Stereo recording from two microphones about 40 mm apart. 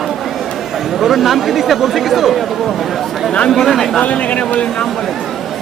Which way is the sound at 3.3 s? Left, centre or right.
Centre.